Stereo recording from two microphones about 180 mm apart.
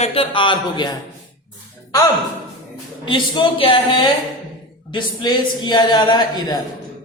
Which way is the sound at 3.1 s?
25° left (ahead or behind).